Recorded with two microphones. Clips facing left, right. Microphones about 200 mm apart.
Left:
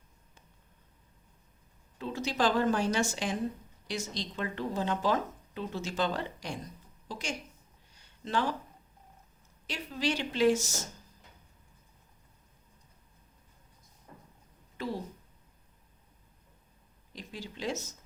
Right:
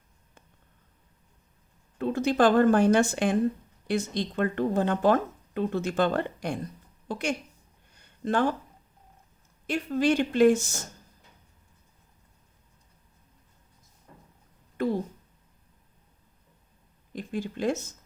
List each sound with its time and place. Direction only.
2.0 s a woman's voice: 55° right (ahead or behind)
7.9 s a sound: 55° right (ahead or behind)
9.6 s speech: 50° right (ahead or behind)
14.8 s a woman's voice: 55° right (ahead or behind)
17.1 s speech: 50° right (ahead or behind)